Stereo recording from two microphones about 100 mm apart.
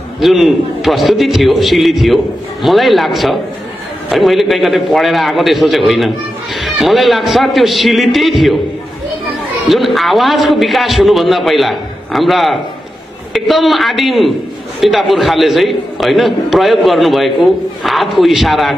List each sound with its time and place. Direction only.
0.2 s a man's voice: centre (ahead or behind)
9.7 s a man's voice: centre (ahead or behind)